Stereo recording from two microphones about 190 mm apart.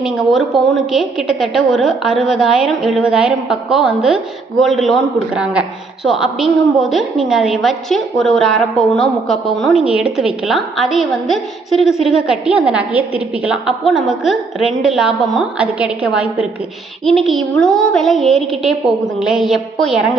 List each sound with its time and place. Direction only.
0.0 s a woman's voice: centre (ahead or behind)